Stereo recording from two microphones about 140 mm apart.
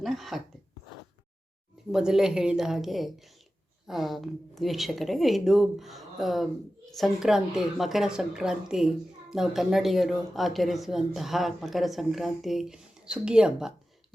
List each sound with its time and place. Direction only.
0.0 s speech: centre (ahead or behind)
1.9 s speech: 5° right (ahead or behind)